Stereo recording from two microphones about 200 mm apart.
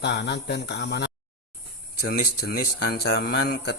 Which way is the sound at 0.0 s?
60° left (ahead or behind).